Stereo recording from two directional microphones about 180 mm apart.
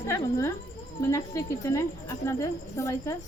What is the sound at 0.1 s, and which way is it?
A woman's voice, 15° left (ahead or behind).